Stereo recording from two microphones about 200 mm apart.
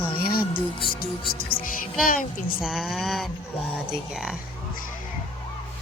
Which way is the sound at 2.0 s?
45° left (ahead or behind).